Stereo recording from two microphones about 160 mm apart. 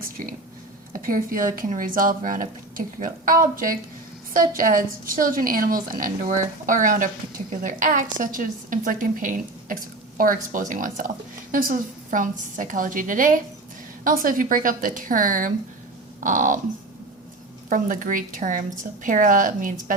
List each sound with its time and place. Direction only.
0.9 s speech: 60° right (ahead or behind)
17.7 s speech: 55° right (ahead or behind)